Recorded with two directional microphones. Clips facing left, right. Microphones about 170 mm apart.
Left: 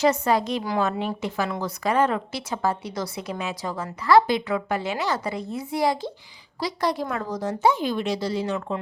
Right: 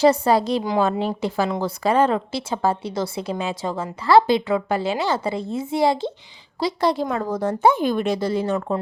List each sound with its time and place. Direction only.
0.0 s a woman's voice: 35° right (ahead or behind)
7.3 s speech: 55° right (ahead or behind)